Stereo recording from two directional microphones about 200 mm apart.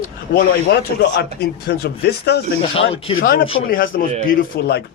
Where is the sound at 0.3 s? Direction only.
55° left (ahead or behind).